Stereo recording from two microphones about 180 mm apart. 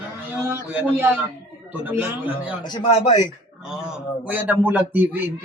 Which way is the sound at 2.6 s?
25° left (ahead or behind).